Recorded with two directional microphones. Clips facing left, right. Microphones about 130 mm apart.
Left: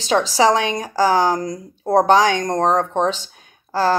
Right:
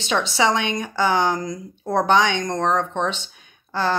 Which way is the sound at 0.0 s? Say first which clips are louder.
Left 5 dB; 35° left (ahead or behind).